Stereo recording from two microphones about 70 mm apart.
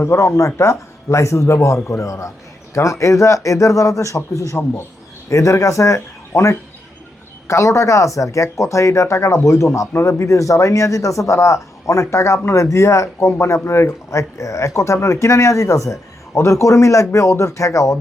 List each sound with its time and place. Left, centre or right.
0.0 s a man's voice: left